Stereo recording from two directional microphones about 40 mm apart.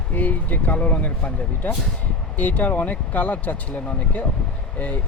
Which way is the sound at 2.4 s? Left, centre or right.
Left.